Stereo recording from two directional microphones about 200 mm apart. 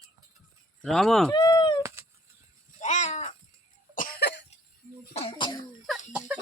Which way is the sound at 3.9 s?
45° left (ahead or behind).